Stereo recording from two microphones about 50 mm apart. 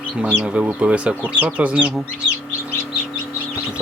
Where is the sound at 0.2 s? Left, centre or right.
Right.